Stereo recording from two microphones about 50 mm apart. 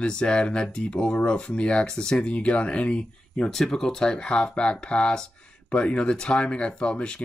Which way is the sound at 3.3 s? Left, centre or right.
Centre.